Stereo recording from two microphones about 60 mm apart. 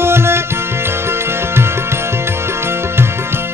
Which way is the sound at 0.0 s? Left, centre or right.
Right.